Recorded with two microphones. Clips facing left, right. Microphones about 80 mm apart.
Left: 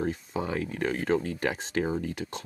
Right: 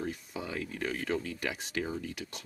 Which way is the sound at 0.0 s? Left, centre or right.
Left.